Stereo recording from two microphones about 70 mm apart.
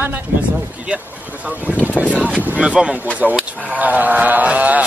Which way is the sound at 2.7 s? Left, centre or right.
Centre.